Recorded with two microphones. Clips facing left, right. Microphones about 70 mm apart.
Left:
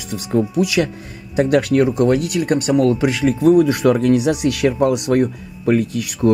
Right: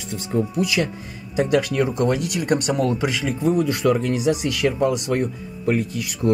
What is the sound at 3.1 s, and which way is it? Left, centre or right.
Speech, left.